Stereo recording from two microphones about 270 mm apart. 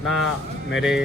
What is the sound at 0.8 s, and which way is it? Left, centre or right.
Speech, centre.